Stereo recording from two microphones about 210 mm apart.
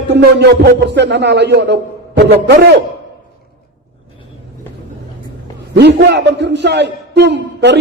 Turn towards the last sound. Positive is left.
turn(degrees=-55)  # may be behind; listen again after turning